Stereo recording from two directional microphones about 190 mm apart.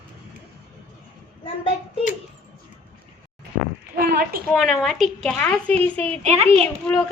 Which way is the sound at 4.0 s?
55° right (ahead or behind).